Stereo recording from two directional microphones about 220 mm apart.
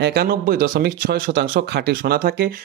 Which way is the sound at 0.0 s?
45° right (ahead or behind).